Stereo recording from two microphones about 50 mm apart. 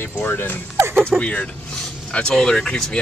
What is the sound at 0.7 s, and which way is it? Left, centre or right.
Speech, right.